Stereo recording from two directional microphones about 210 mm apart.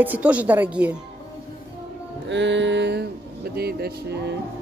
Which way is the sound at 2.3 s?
60° right (ahead or behind).